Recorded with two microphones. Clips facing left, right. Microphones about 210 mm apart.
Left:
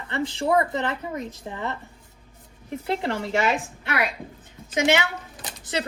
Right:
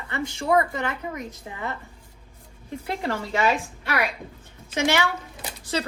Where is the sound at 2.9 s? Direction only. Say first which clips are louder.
Left 2 dB; 30° left (ahead or behind).